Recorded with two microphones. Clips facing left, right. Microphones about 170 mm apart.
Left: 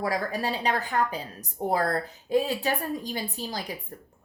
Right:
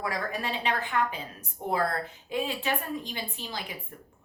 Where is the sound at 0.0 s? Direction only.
35° left (ahead or behind).